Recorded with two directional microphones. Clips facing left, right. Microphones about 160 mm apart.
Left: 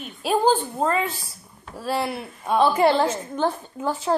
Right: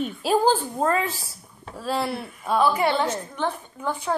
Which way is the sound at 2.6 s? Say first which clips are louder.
Left 4 dB; 30° left (ahead or behind).